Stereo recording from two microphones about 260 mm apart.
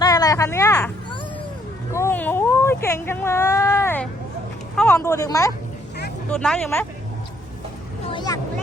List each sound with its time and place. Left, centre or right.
0.0 s a sound: centre
4.8 s a woman's voice: centre
8.1 s vehicle: centre